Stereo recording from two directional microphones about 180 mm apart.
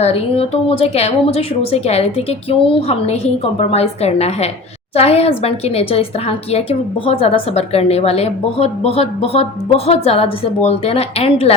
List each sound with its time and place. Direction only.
0.0 s a woman's voice: 35° left (ahead or behind)